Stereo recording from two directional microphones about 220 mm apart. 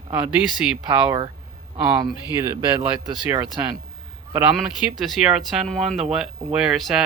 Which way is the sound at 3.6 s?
10° right (ahead or behind).